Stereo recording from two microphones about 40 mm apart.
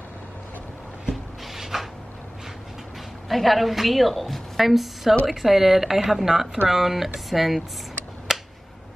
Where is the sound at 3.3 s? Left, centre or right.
Centre.